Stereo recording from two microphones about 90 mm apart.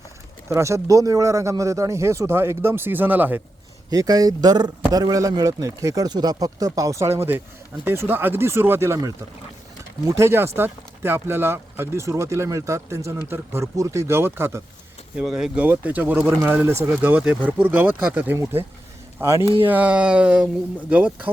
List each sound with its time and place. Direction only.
0.4 s speech: 30° right (ahead or behind)
3.8 s speech: 45° right (ahead or behind); by 14.6 s 30° right (ahead or behind)
15.1 s speech: 10° right (ahead or behind)
15.5 s speech: 15° right (ahead or behind)
16.2 s speech: 30° right (ahead or behind)
16.9 s speech: 15° right (ahead or behind)
19.6 s speech: 15° right (ahead or behind)